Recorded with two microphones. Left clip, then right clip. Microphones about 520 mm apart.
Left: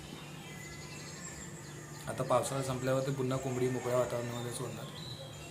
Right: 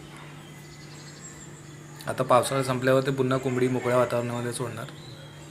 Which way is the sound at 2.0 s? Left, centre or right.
Left.